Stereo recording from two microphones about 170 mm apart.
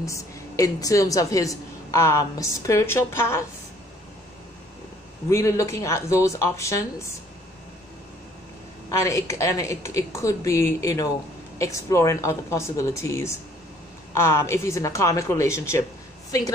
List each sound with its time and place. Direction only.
0.0 s a woman's voice: 20° left (ahead or behind)
5.3 s a woman's voice: 15° left (ahead or behind)
9.0 s a woman's voice: 15° left (ahead or behind)